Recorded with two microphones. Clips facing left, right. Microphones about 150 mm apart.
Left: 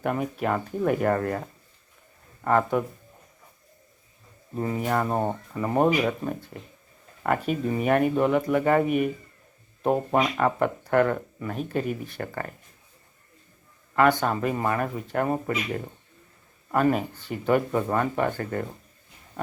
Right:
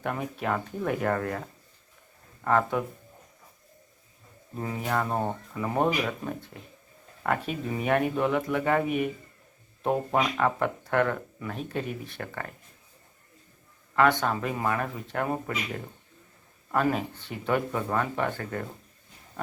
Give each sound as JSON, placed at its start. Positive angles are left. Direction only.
{"t": 0.0, "sound": "speech", "side_deg": 5}
{"t": 2.4, "sound": "speech", "side_deg": 5}
{"t": 4.5, "sound": "speech", "side_deg": 0}
{"t": 13.9, "sound": "speech", "side_deg": 5}
{"t": 16.7, "sound": "speech", "side_deg": 5}